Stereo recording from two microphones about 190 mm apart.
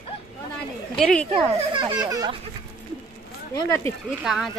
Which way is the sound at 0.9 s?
5° left (ahead or behind).